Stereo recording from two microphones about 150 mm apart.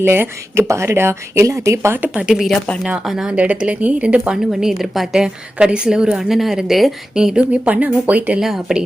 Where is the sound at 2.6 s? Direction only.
10° left (ahead or behind).